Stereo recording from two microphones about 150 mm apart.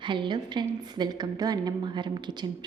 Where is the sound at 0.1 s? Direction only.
30° right (ahead or behind).